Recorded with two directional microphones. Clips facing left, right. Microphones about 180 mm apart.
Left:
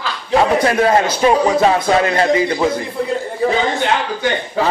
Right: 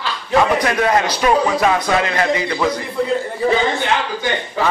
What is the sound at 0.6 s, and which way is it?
A man's voice, 30° left (ahead or behind).